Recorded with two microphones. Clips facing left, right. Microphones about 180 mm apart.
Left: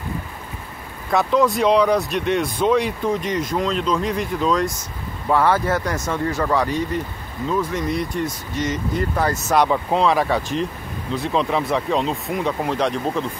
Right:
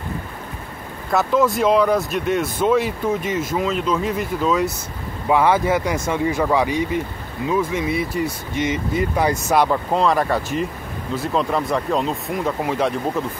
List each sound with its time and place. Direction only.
1.1 s speech: centre (ahead or behind)
9.7 s speech: centre (ahead or behind)